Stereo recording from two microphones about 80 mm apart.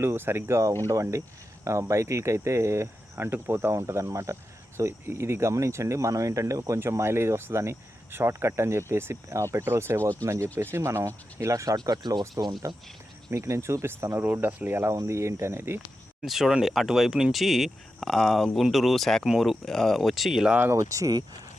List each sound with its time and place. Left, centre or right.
0.0 s speech: right
11.8 s speech: right
12.6 s speech: right
16.2 s speech: centre
20.7 s speech: right